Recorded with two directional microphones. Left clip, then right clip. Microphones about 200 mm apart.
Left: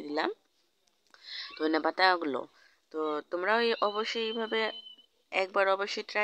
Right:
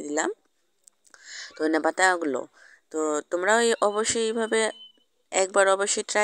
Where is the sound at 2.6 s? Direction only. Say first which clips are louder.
Right 6 dB; 35° right (ahead or behind).